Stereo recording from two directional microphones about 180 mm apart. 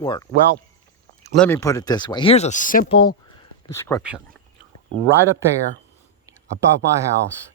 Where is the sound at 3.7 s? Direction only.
15° left (ahead or behind).